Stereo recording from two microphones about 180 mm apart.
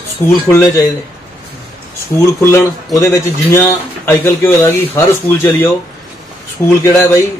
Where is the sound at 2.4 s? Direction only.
15° left (ahead or behind).